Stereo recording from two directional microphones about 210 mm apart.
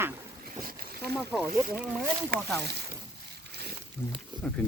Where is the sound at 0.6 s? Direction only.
45° right (ahead or behind).